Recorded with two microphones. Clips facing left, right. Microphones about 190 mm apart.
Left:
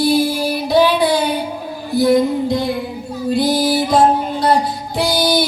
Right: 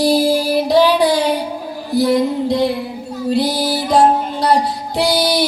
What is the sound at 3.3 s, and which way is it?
Music, 35° right (ahead or behind).